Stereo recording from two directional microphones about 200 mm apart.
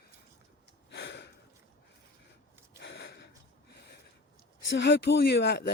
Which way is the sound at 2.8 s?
60° left (ahead or behind).